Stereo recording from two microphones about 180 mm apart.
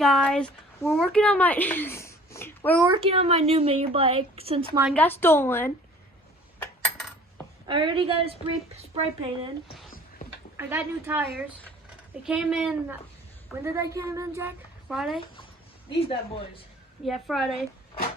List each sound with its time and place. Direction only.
0.0 s a child's voice: 5° left (ahead or behind)
2.8 s speech: 30° right (ahead or behind)
4.9 s speech: 10° left (ahead or behind)
7.7 s a woman's voice: 25° right (ahead or behind)
10.6 s a woman's voice: 10° right (ahead or behind)
13.7 s a woman's voice: 15° right (ahead or behind)
14.8 s speech: centre (ahead or behind)
15.9 s speech: 30° left (ahead or behind)
17.1 s speech: centre (ahead or behind)